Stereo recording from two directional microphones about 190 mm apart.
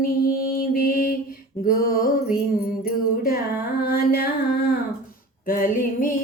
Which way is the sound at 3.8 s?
50° left (ahead or behind).